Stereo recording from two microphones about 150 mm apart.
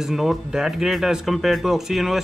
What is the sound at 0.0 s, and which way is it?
Speech, centre (ahead or behind).